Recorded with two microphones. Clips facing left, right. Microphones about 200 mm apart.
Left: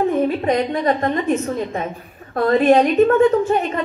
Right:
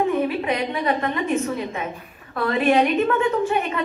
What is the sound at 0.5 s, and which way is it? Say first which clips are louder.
A man's voice: left 5 dB; 40° left (ahead or behind).